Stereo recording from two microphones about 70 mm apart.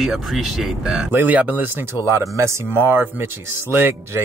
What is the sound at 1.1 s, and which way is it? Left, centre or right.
Speech, right.